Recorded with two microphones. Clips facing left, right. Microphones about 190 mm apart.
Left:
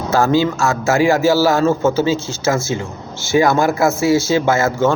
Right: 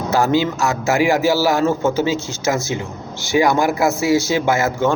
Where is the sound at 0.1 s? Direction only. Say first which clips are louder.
Left 2 dB; 15° right (ahead or behind).